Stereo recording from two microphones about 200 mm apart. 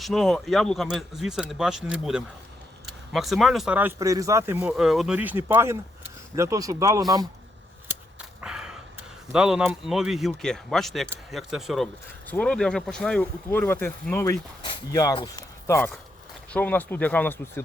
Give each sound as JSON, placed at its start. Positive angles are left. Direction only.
{"t": 0.0, "sound": "speech", "side_deg": 0}
{"t": 8.4, "sound": "a sound", "side_deg": -5}
{"t": 9.3, "sound": "speech", "side_deg": -5}